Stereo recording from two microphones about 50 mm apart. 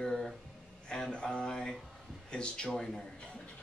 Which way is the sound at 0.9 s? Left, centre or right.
Centre.